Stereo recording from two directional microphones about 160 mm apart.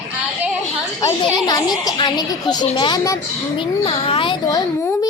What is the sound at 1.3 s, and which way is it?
A child's voice, 25° left (ahead or behind).